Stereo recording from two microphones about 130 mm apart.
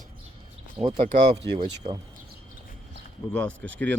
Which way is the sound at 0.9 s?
55° right (ahead or behind).